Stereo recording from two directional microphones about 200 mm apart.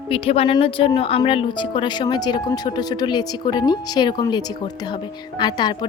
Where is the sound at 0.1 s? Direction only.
30° left (ahead or behind).